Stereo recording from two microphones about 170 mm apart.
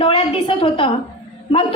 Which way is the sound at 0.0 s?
30° left (ahead or behind).